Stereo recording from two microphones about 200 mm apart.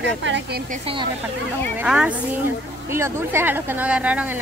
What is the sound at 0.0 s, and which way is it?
Speech, 65° right (ahead or behind).